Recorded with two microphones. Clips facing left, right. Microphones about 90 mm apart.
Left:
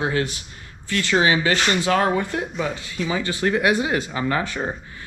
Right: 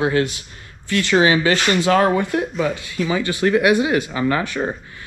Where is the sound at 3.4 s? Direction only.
80° right.